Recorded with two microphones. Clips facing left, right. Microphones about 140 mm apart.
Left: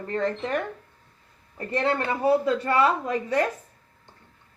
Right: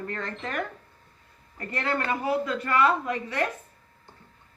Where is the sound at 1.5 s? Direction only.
20° left (ahead or behind).